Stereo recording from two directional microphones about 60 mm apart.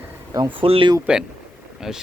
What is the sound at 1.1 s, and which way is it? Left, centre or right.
Speech, centre.